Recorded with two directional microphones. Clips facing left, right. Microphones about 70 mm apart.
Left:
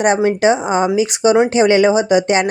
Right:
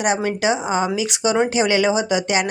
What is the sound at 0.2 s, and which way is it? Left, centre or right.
Speech, left.